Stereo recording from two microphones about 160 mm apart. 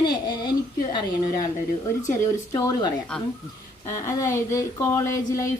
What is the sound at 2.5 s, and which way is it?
Speech, 25° left (ahead or behind).